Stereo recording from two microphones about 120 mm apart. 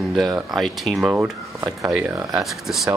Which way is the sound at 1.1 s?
15° right (ahead or behind).